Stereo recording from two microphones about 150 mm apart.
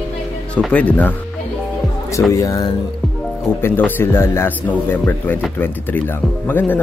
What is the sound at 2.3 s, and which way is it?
Speech, 20° left (ahead or behind).